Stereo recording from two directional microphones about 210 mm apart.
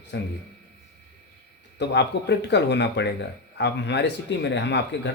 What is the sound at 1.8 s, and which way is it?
Speech, 55° left (ahead or behind).